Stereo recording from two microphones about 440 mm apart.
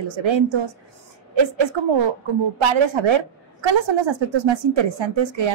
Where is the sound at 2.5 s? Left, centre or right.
Right.